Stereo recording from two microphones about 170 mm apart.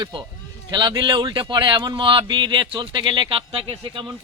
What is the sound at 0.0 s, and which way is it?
A man's voice, 30° right (ahead or behind).